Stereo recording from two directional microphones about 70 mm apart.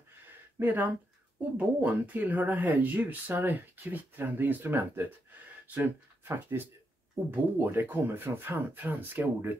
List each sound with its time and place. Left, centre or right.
0.6 s speech: right